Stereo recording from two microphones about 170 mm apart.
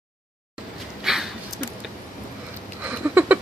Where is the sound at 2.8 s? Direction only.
10° right (ahead or behind).